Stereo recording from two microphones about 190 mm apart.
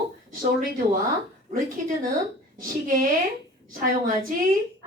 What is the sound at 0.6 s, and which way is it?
A woman's voice, 45° right (ahead or behind).